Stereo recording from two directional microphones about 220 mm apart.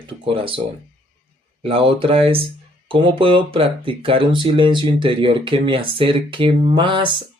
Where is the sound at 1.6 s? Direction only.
25° right (ahead or behind).